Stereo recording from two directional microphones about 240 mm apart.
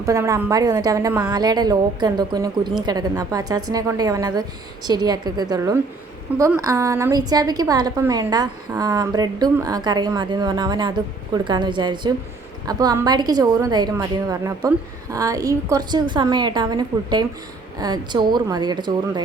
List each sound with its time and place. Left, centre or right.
0.0 s a woman's voice: centre